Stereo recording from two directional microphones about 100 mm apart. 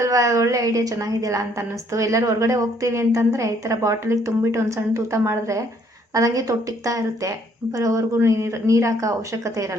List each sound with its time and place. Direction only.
0.0 s a woman's voice: 30° right (ahead or behind)